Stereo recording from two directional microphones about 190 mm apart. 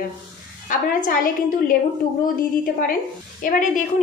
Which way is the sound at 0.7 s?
45° left (ahead or behind).